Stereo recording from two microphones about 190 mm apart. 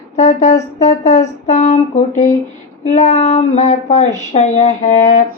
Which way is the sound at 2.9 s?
35° left (ahead or behind).